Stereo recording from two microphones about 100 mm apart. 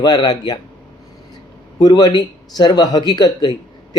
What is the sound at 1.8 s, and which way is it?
Speech, 45° left (ahead or behind).